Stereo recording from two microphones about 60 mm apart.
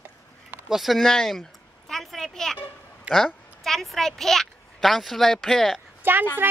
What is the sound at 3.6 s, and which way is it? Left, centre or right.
Speech, centre.